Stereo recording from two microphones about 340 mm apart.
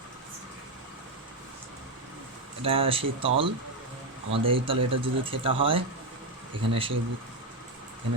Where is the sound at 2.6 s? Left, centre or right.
Centre.